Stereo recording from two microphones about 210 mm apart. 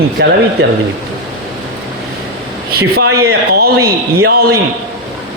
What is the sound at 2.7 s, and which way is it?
A man's voice, 50° right (ahead or behind).